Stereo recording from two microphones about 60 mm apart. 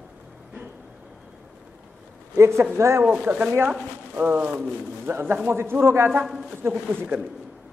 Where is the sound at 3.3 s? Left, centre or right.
Right.